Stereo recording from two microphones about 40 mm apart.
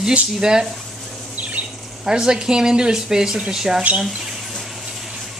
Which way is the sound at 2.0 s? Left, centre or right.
Centre.